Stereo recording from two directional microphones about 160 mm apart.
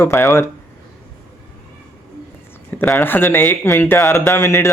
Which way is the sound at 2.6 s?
10° left (ahead or behind).